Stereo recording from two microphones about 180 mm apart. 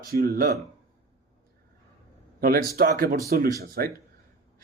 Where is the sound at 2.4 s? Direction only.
55° right (ahead or behind).